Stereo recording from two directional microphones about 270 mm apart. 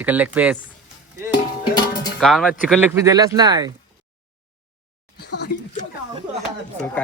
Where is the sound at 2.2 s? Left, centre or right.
Centre.